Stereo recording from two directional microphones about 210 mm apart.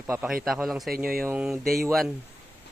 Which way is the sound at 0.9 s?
45° right (ahead or behind).